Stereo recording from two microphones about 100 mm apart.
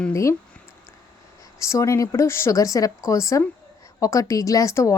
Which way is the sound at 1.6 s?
30° left (ahead or behind).